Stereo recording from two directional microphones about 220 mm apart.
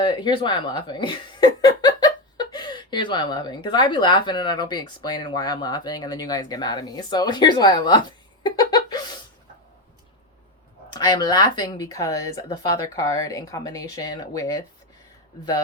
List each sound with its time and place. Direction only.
0.0 s speech: 20° left (ahead or behind)
10.8 s speech: 20° left (ahead or behind)